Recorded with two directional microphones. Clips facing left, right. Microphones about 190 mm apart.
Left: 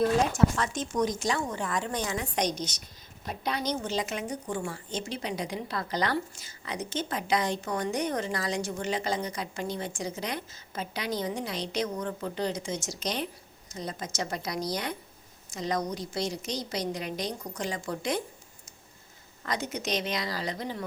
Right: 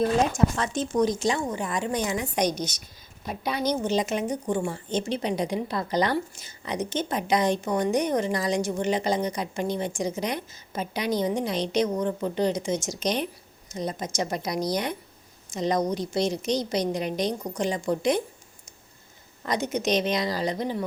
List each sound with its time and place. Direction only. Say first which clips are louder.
0.0 s a woman's voice: right 2 dB; 20° right (ahead or behind)
1.5 s a woman's voice: right 4 dB; 15° right (ahead or behind)
19.4 s a woman's voice: right 6 dB; 20° right (ahead or behind)